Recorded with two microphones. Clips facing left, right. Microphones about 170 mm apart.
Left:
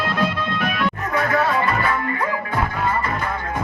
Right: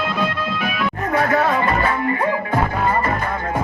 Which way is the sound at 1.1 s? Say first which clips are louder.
Right 3 dB; 40° right (ahead or behind).